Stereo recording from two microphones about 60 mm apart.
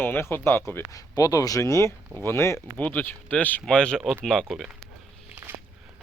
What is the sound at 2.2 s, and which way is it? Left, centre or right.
Speech, left.